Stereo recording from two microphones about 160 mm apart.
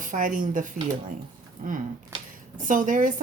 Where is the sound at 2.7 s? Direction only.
55° right (ahead or behind).